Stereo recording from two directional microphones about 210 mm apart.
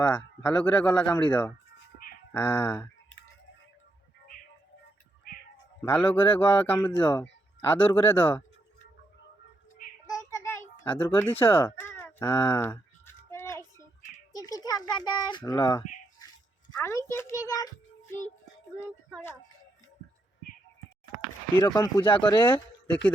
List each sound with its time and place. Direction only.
0.0 s a man's voice: 5° left (ahead or behind)
5.8 s a man's voice: 10° left (ahead or behind)
10.1 s fowl: 15° left (ahead or behind)
14.3 s a child's voice: 20° left (ahead or behind)
21.6 s speech: 15° left (ahead or behind)